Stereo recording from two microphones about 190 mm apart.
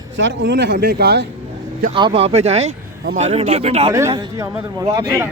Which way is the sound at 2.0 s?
30° right (ahead or behind).